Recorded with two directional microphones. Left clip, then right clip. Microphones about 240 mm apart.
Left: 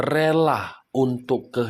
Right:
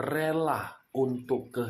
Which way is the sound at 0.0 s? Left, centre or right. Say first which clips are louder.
Left 9 dB; left.